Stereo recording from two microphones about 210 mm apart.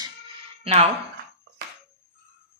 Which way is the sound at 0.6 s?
30° right (ahead or behind).